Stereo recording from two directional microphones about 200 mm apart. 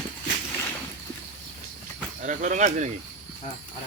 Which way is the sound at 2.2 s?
40° right (ahead or behind).